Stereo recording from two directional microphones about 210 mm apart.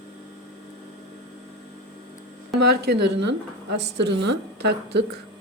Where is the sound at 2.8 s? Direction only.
50° right (ahead or behind).